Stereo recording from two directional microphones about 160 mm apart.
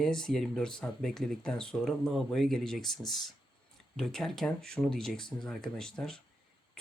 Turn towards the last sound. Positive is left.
turn(degrees=5)  # may be behind; listen again after turning